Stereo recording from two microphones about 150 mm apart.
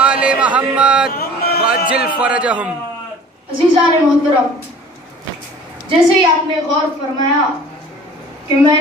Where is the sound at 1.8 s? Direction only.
10° right (ahead or behind).